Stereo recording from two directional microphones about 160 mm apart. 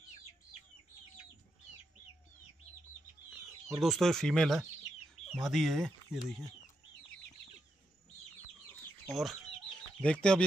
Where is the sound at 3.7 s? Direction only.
Centre (ahead or behind).